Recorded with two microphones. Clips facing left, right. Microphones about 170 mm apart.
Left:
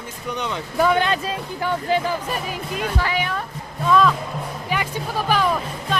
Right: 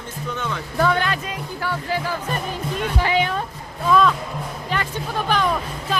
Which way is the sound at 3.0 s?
25° right (ahead or behind).